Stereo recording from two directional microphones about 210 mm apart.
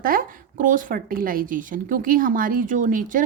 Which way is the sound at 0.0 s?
40° right (ahead or behind).